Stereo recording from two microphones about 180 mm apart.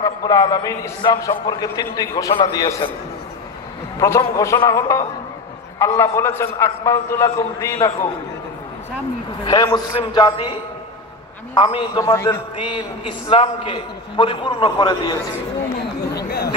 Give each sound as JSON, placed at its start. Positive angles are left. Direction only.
{"t": 0.0, "sound": "a man's voice", "side_deg": 20}
{"t": 4.0, "sound": "a man's voice", "side_deg": 15}
{"t": 9.4, "sound": "a man's voice", "side_deg": 20}
{"t": 11.5, "sound": "a man's voice", "side_deg": 25}
{"t": 12.5, "sound": "a man's voice", "side_deg": 25}
{"t": 16.2, "sound": "chatter", "side_deg": 60}